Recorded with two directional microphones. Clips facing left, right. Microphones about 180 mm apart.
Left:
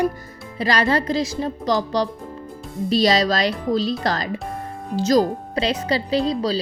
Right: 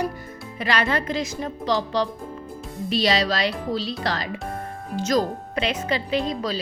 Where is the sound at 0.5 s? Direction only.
35° left (ahead or behind).